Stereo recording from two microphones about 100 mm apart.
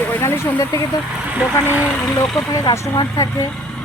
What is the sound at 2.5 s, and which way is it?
Speech, 35° left (ahead or behind).